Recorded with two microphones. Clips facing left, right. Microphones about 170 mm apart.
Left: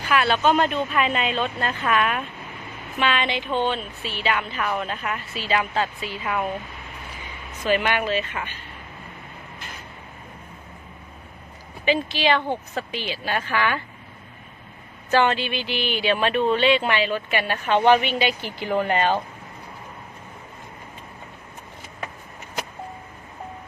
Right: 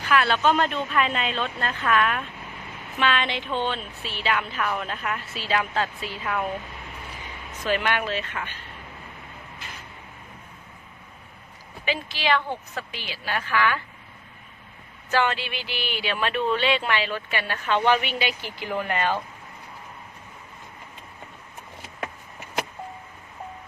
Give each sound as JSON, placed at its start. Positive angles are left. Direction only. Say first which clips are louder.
{"t": 0.1, "sound": "a woman's voice", "louder": "left 1 dB", "side_deg": 5}
{"t": 7.6, "sound": "a woman's voice", "louder": "left 3 dB", "side_deg": 5}
{"t": 11.9, "sound": "speech", "louder": "left 4 dB", "side_deg": 20}
{"t": 15.1, "sound": "speech", "louder": "left 4 dB", "side_deg": 25}